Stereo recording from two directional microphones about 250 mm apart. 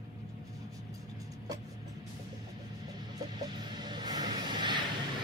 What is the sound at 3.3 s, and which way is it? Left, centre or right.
Music, centre.